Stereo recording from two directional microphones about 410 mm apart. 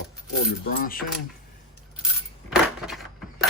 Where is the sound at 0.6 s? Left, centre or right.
Left.